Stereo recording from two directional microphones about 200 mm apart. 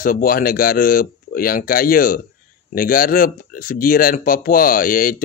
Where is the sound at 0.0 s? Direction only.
45° left (ahead or behind).